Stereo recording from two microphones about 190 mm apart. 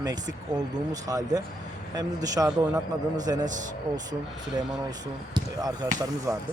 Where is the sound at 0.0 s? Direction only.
20° right (ahead or behind).